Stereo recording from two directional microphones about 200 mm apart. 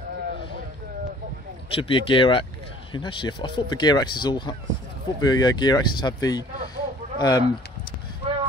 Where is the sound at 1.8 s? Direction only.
25° left (ahead or behind).